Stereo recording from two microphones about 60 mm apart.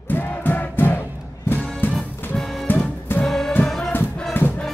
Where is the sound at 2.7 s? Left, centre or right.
Left.